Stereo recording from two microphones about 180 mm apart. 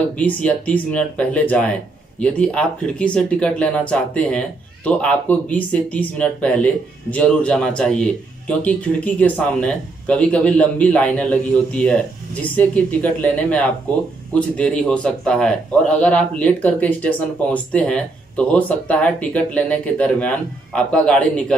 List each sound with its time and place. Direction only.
0.2 s speech: 10° left (ahead or behind)